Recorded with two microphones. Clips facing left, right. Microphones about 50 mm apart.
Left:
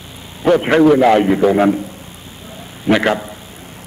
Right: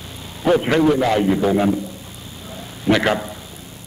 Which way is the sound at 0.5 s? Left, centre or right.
Left.